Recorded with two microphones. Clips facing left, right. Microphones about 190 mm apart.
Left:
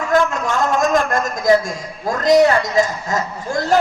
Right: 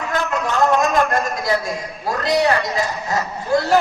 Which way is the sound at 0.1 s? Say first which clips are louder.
Left 5 dB; 45° left (ahead or behind).